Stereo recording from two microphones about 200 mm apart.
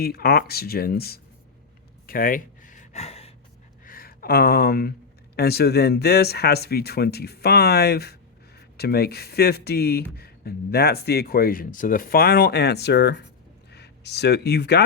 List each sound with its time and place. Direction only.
0.0 s speech: 50° left (ahead or behind)
2.0 s gasp: 45° left (ahead or behind)
3.8 s speech: 45° left (ahead or behind)